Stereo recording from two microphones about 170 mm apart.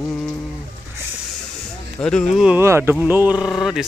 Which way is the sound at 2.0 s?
5° left (ahead or behind).